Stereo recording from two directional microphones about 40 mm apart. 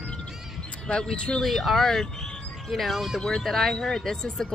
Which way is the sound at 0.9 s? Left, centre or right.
Left.